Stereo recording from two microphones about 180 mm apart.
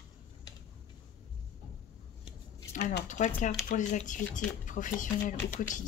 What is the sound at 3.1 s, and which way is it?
Speech, 45° left (ahead or behind).